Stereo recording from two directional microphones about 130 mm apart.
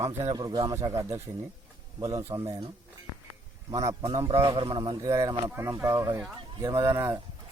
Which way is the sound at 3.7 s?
25° right (ahead or behind).